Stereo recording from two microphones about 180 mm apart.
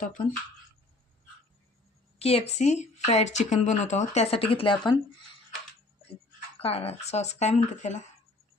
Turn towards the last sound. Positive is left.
turn(degrees=40)  # may be behind; listen again after turning